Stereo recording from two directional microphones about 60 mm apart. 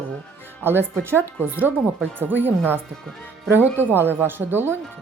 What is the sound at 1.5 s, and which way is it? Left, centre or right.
Speech, right.